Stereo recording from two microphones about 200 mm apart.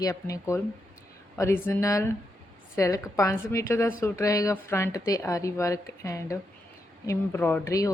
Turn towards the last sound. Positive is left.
turn(degrees=15)  # may be behind; listen again after turning